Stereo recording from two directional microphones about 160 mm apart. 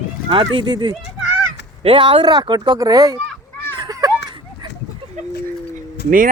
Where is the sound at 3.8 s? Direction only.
25° right (ahead or behind).